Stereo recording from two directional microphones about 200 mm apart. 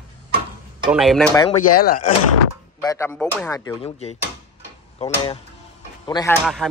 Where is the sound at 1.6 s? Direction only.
40° left (ahead or behind).